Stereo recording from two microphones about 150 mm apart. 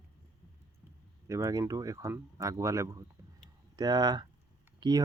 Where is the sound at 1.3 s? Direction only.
20° right (ahead or behind).